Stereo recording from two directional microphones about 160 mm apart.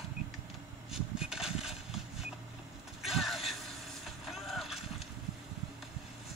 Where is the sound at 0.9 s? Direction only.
5° right (ahead or behind).